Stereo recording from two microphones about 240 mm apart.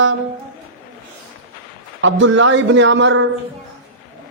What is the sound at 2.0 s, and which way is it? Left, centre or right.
A man's voice, right.